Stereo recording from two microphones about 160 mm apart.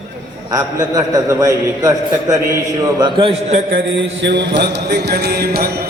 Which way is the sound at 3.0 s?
30° right (ahead or behind).